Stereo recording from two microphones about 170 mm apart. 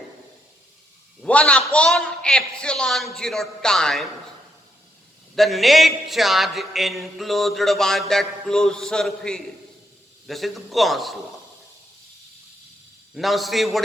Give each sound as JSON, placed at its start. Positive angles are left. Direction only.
{"t": 1.2, "sound": "a man's voice", "side_deg": 5}
{"t": 5.3, "sound": "a man's voice", "side_deg": 0}
{"t": 13.1, "sound": "a man's voice", "side_deg": 0}